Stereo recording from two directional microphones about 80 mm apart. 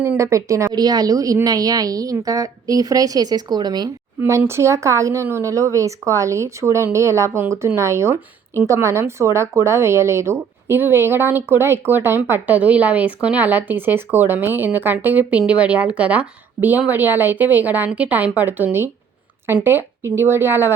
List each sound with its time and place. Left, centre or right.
0.2 s speech: right
0.7 s a woman's voice: right
4.2 s speech: right